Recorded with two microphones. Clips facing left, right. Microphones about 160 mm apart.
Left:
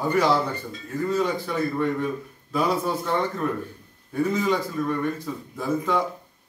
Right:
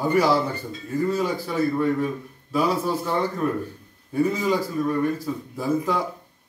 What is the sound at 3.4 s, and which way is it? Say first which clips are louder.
Speech: right 2 dB; 5° right (ahead or behind).